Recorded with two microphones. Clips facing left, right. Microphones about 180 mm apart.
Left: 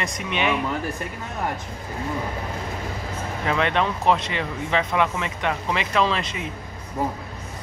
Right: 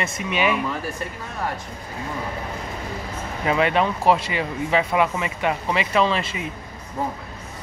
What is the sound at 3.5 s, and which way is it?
Speech, 5° right (ahead or behind).